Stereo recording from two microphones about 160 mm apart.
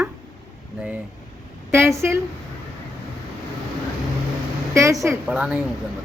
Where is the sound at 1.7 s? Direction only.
15° right (ahead or behind).